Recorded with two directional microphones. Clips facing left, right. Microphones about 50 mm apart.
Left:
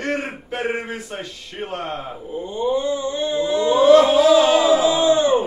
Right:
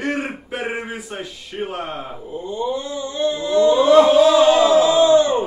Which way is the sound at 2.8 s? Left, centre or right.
Left.